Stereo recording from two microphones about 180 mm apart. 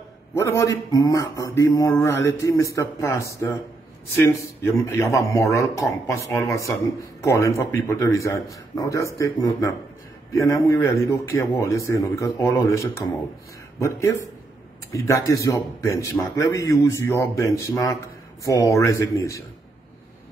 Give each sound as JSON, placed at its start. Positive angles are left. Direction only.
{"t": 0.3, "sound": "a man's voice", "side_deg": 15}